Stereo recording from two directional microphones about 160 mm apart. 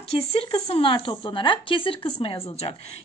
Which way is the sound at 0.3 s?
40° left (ahead or behind).